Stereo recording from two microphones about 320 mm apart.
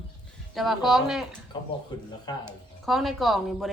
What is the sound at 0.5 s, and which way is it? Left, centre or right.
Speech, centre.